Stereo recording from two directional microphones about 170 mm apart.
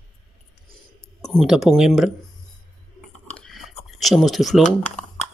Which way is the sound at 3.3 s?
Centre (ahead or behind).